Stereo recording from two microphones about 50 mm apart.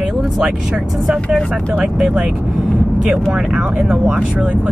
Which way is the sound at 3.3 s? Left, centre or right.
Centre.